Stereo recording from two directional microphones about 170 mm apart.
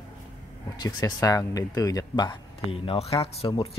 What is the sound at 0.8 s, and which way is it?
Speech, 25° left (ahead or behind).